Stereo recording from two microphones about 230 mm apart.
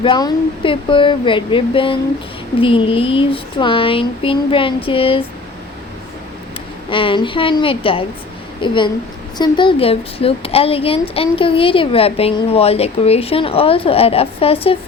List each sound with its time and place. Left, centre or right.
0.0 s a woman's voice: centre
6.9 s a woman's voice: left